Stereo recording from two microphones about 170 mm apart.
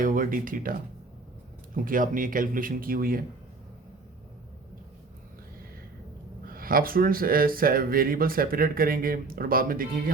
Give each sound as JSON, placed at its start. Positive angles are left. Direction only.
{"t": 0.0, "sound": "speech", "side_deg": -55}
{"t": 6.4, "sound": "speech", "side_deg": -60}